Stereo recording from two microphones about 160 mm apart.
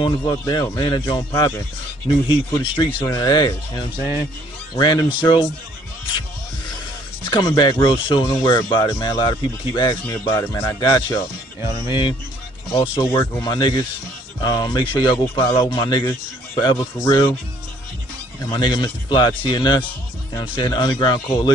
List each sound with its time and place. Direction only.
0.0 s speech: 30° left (ahead or behind)
2.2 s speech: 30° left (ahead or behind)
3.9 s speech: 15° right (ahead or behind)
4.7 s speech: 25° left (ahead or behind)
7.2 s speech: 30° left (ahead or behind)
13.1 s speech: 15° left (ahead or behind)
13.4 s speech: 25° left (ahead or behind)
18.4 s speech: 30° left (ahead or behind)